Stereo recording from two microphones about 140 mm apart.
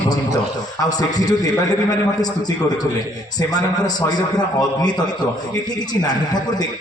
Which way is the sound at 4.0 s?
30° left (ahead or behind).